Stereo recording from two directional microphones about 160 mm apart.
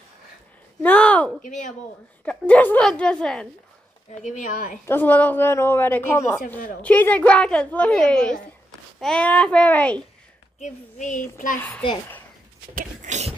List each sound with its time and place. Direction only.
0.8 s a sound: 5° left (ahead or behind)
1.4 s speech: 50° left (ahead or behind)
2.2 s a woman's voice: 10° left (ahead or behind)
4.1 s speech: 50° left (ahead or behind)
4.8 s a woman's voice: 10° left (ahead or behind)
10.6 s speech: 50° left (ahead or behind)
12.7 s a sound: 50° right (ahead or behind)